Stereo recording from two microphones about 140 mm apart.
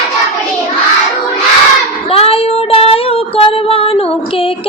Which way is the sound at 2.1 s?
45° left (ahead or behind).